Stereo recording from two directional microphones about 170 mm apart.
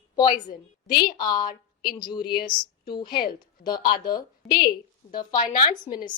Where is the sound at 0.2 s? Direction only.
25° left (ahead or behind).